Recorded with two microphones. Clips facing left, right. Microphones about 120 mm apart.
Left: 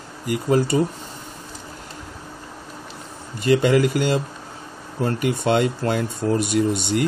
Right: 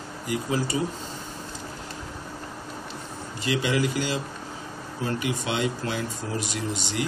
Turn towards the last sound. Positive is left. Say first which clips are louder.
# left 9 dB
turn(degrees=55)  # may be behind; listen again after turning